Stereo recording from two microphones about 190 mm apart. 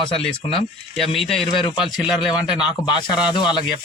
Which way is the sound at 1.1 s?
Centre (ahead or behind).